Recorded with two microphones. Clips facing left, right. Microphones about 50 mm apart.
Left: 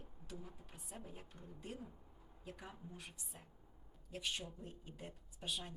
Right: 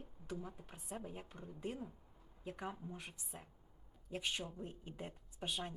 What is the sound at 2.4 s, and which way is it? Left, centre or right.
A woman's voice, right.